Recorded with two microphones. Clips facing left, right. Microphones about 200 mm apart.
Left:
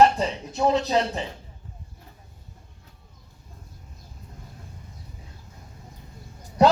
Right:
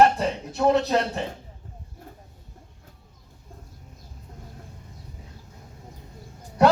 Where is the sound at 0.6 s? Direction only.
60° right (ahead or behind).